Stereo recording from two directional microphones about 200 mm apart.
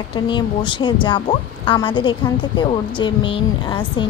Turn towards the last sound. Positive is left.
turn(degrees=25)  # may be behind; listen again after turning